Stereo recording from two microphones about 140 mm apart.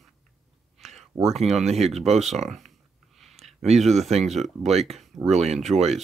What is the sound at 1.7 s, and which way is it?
Speech, 50° right (ahead or behind).